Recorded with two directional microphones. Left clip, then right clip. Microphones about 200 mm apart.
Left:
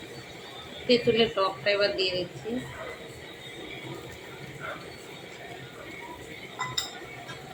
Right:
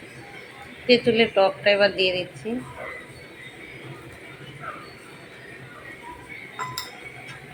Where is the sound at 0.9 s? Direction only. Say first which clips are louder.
Right 4 dB; 20° right (ahead or behind).